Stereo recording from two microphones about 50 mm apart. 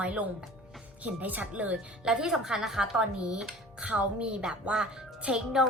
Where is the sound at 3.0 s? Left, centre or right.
Centre.